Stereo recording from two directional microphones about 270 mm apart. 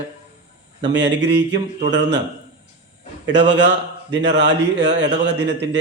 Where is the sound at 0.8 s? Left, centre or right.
Right.